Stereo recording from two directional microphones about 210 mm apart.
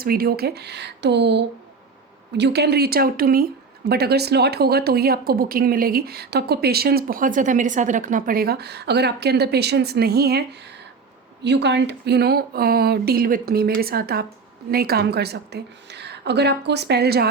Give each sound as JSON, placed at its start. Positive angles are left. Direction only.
{"t": 0.0, "sound": "speech", "side_deg": -45}
{"t": 11.4, "sound": "speech", "side_deg": -55}